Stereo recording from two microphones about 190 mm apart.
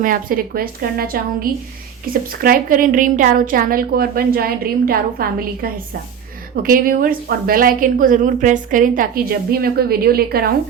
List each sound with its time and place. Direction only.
0.0 s speech: 50° right (ahead or behind)